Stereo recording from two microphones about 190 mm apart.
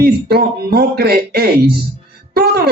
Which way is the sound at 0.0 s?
55° right (ahead or behind).